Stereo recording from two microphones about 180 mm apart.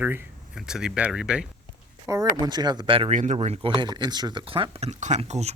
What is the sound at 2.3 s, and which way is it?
Speech, 20° right (ahead or behind).